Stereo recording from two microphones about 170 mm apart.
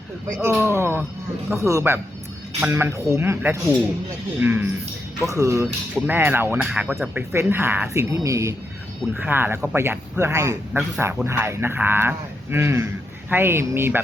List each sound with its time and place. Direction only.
0.3 s speech: 15° right (ahead or behind)